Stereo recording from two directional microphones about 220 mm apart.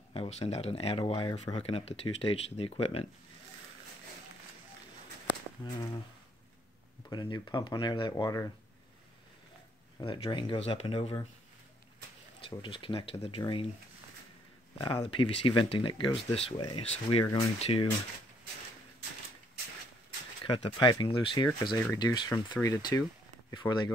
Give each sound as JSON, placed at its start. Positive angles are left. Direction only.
{"t": 0.1, "sound": "speech", "side_deg": 25}
{"t": 5.6, "sound": "speech", "side_deg": 20}
{"t": 7.1, "sound": "speech", "side_deg": 20}
{"t": 9.9, "sound": "speech", "side_deg": 25}
{"t": 12.4, "sound": "speech", "side_deg": 25}
{"t": 14.8, "sound": "speech", "side_deg": 20}
{"t": 20.4, "sound": "speech", "side_deg": 25}